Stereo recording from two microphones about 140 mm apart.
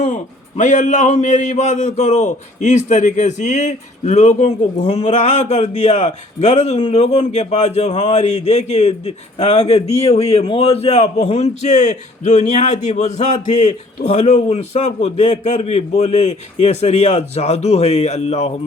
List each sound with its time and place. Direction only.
0.0 s a man's voice: 55° left (ahead or behind)